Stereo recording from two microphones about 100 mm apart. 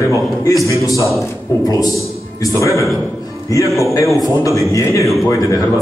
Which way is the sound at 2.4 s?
30° left (ahead or behind).